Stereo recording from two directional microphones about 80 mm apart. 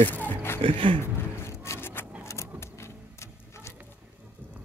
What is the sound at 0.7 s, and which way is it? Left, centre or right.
Speech, right.